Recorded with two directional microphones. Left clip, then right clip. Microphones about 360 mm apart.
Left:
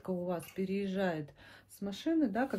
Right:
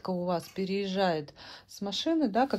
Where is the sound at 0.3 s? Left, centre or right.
Centre.